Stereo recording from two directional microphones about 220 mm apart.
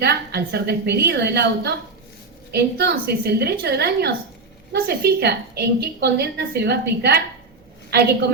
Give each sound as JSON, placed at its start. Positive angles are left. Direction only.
{"t": 0.0, "sound": "a woman's voice", "side_deg": -45}